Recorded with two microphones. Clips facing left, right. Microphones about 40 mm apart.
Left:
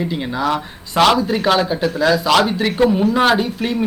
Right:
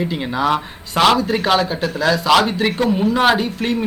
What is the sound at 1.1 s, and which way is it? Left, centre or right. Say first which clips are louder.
A man's voice: even; centre.